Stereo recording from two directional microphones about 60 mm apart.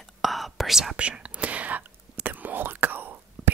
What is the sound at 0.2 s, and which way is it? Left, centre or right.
Whispering, centre.